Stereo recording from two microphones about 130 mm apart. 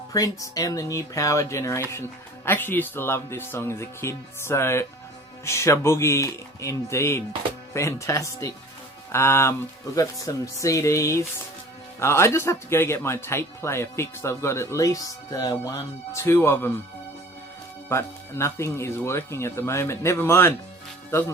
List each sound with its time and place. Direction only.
0.1 s speech: 25° left (ahead or behind)
17.8 s speech: 20° left (ahead or behind)